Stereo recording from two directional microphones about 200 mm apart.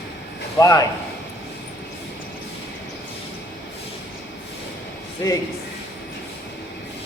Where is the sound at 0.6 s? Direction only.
15° left (ahead or behind).